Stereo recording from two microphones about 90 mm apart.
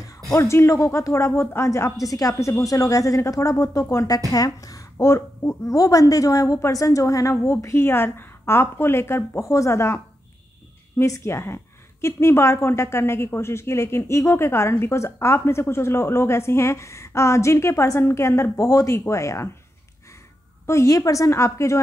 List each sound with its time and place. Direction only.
0.3 s a woman's voice: 30° left (ahead or behind)
4.9 s a woman's voice: 30° left (ahead or behind)
20.6 s a woman's voice: 35° left (ahead or behind)